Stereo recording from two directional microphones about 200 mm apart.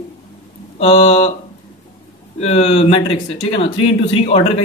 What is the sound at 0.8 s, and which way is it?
Speech, 30° left (ahead or behind).